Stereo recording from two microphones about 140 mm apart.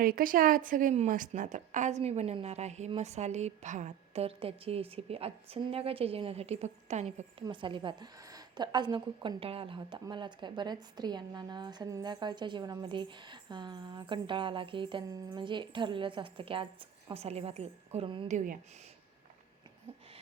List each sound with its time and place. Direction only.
0.0 s a woman's voice: 90° right; by 7.3 s 55° right (ahead or behind)
7.4 s a woman's voice: 35° right (ahead or behind)
18.3 s speech: 60° right (ahead or behind)